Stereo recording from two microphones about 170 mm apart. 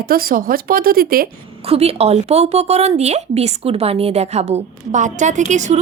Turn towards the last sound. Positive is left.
turn(degrees=-45)  # may be behind; listen again after turning